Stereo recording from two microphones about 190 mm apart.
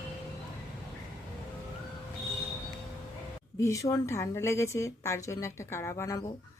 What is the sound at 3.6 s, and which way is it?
A woman's voice, 15° left (ahead or behind).